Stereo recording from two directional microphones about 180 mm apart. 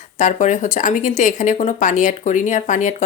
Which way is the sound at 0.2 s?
45° left (ahead or behind).